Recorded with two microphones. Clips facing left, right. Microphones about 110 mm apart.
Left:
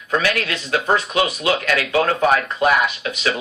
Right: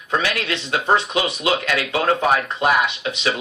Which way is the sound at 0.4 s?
25° right (ahead or behind).